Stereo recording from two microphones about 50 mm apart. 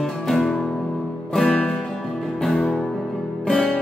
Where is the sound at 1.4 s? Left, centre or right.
Left.